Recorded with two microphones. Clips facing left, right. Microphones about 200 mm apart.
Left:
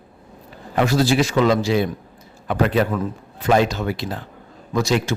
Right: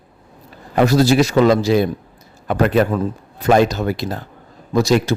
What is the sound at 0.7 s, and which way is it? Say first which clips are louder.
A man's voice: right 4 dB; 40° right (ahead or behind).